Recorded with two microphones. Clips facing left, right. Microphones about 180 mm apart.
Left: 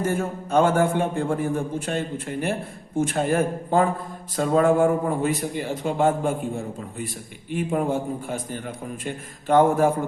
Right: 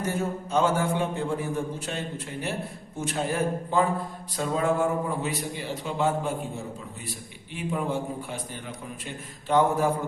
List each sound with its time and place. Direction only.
0.0 s a man's voice: 55° left (ahead or behind)